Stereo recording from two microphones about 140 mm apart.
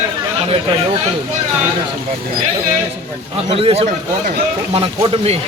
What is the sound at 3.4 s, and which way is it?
A man's voice, 40° right (ahead or behind).